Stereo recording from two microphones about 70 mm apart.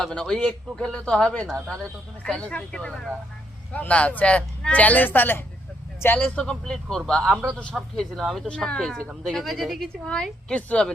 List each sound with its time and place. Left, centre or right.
0.0 s speech: centre
6.4 s speech: centre
7.9 s a woman's voice: centre
8.4 s a woman's voice: centre